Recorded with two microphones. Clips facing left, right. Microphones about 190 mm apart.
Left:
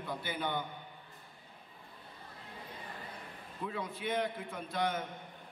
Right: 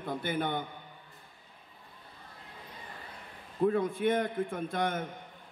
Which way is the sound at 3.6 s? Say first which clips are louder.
Right 12 dB; 50° right (ahead or behind).